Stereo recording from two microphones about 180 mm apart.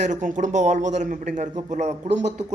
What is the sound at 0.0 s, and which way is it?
A man's voice, 45° right (ahead or behind).